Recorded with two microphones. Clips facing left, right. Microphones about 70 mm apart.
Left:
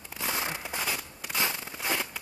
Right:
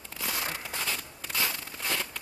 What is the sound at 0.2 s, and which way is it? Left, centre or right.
Fireworks, left.